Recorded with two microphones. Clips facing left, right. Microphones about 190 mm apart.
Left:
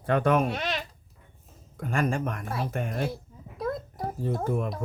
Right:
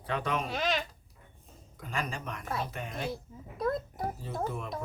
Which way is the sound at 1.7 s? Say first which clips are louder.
Left 9 dB; 50° left (ahead or behind).